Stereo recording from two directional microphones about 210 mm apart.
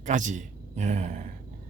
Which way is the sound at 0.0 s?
35° right (ahead or behind).